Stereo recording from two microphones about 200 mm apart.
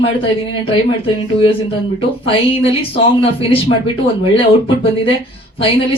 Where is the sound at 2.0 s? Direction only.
30° left (ahead or behind).